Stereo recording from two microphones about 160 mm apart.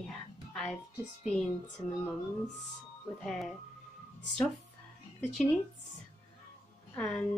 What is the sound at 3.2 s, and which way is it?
Speech, centre (ahead or behind).